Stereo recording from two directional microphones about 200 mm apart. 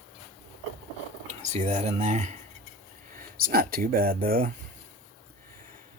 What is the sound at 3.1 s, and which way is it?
Speech, 45° right (ahead or behind).